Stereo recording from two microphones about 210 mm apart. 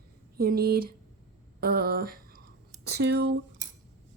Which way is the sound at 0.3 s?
45° right (ahead or behind).